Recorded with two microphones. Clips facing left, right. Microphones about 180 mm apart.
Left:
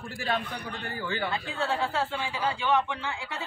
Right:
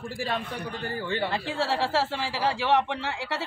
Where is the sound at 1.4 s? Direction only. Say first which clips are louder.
Right 2 dB; 85° right.